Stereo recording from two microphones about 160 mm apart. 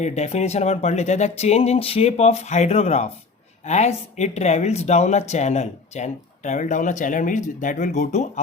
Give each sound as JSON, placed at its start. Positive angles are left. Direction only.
{"t": 0.0, "sound": "speech", "side_deg": 45}